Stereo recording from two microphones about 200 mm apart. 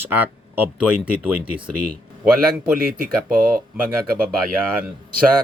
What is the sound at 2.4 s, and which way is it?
Speech, 45° right (ahead or behind).